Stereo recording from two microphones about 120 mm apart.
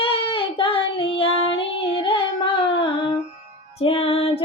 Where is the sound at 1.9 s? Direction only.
45° left (ahead or behind).